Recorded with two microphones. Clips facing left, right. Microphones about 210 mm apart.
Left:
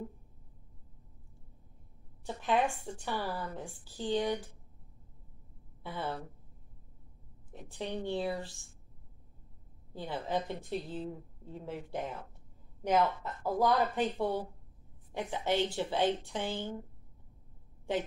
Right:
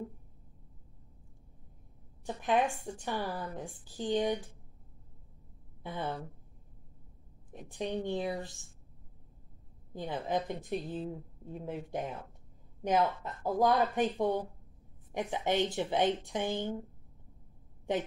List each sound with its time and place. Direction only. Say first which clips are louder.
2.2 s a woman's voice: right 1 dB; 15° right (ahead or behind)
5.8 s a woman's voice: right 1 dB; 15° right (ahead or behind)
7.5 s a woman's voice: right 3 dB; 15° right (ahead or behind)
9.9 s a woman's voice: right 1 dB; 15° right (ahead or behind)